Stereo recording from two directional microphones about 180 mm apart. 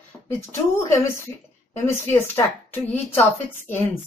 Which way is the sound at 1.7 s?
10° left (ahead or behind).